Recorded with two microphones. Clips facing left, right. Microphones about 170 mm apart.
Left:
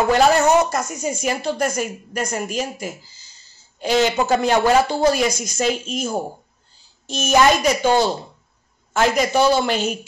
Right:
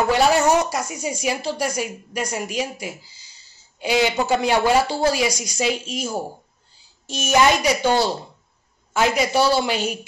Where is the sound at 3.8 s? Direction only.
10° right (ahead or behind).